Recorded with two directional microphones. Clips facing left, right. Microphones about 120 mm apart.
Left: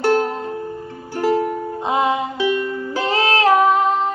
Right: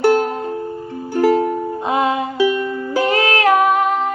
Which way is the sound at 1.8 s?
20° left (ahead or behind).